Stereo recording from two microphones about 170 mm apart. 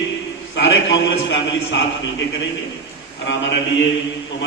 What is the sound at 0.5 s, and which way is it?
A man's voice, 90° left.